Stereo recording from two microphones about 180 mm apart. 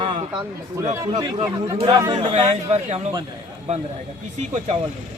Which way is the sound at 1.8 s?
30° right (ahead or behind).